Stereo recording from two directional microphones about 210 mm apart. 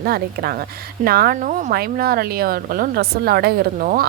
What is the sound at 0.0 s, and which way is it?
Speech, 45° right (ahead or behind).